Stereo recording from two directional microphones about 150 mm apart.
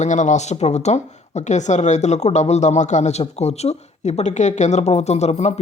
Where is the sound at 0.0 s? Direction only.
55° left (ahead or behind).